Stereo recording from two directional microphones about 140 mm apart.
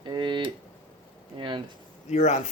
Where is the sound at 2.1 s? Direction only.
55° left (ahead or behind).